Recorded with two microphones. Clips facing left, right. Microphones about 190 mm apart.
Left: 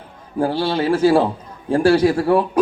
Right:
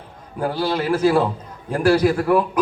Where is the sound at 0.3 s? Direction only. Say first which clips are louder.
Left 3 dB; 30° left (ahead or behind).